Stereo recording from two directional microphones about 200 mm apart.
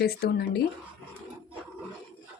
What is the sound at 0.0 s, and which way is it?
Speech, 50° left (ahead or behind).